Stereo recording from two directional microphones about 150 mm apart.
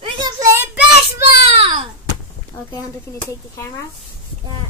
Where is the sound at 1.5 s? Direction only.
40° right (ahead or behind).